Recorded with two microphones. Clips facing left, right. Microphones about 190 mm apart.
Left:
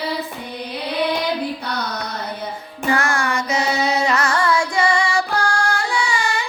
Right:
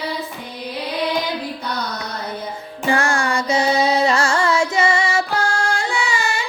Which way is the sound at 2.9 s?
30° right (ahead or behind).